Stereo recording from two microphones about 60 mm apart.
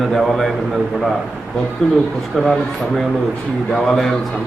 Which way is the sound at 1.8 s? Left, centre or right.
Centre.